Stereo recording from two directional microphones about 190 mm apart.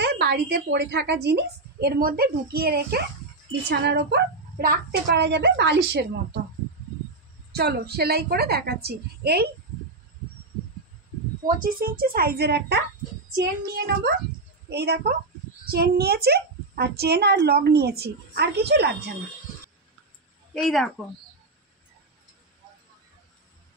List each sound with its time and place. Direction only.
0.0 s speech: 60° right (ahead or behind)
7.5 s speech: 55° right (ahead or behind)
11.4 s a woman's voice: 50° right (ahead or behind)
20.5 s a woman's voice: centre (ahead or behind)